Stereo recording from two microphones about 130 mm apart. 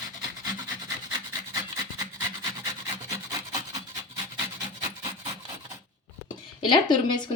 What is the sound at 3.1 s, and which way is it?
Rub, 30° right (ahead or behind).